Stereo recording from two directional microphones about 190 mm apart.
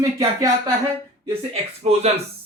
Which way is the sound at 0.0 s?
15° right (ahead or behind).